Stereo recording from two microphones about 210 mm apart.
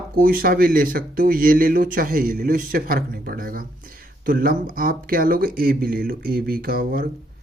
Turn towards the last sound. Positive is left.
turn(degrees=-45)  # may be behind; listen again after turning